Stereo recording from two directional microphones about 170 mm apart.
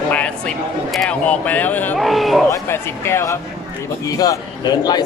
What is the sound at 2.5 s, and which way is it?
A man's voice, 15° left (ahead or behind).